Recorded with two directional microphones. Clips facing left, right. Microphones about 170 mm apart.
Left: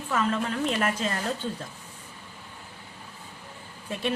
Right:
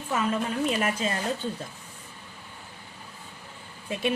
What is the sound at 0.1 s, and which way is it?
A woman's voice, 10° right (ahead or behind).